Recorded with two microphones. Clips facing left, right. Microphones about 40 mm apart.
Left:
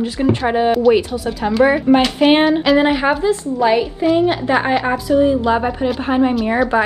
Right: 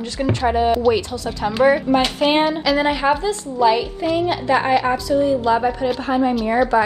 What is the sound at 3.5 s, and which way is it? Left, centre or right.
Speech, left.